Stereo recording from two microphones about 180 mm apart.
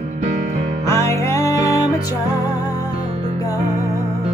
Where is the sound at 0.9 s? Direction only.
15° left (ahead or behind).